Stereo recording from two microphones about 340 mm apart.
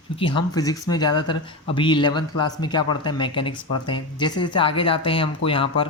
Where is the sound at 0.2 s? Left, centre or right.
Centre.